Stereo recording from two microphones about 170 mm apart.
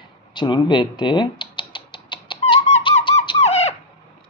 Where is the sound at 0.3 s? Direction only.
25° left (ahead or behind).